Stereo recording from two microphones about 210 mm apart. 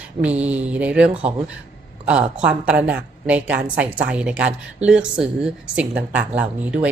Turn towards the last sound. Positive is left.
turn(degrees=-5)  # may be behind; listen again after turning